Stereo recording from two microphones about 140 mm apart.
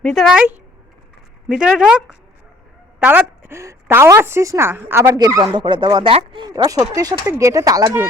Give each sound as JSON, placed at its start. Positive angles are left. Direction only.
{"t": 0.0, "sound": "speech", "side_deg": 0}
{"t": 1.5, "sound": "a woman's voice", "side_deg": -5}
{"t": 6.7, "sound": "speech", "side_deg": -25}